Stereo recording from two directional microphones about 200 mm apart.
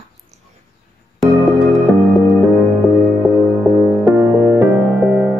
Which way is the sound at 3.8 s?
10° right (ahead or behind).